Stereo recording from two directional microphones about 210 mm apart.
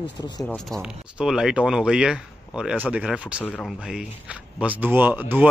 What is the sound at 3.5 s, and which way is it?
Speech, 5° left (ahead or behind).